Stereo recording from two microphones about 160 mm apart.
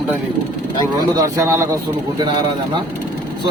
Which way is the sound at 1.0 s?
25° right (ahead or behind).